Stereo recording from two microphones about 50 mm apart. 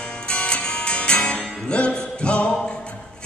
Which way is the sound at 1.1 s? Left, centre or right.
Left.